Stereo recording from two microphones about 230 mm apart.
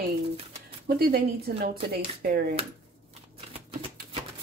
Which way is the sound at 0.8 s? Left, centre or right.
Right.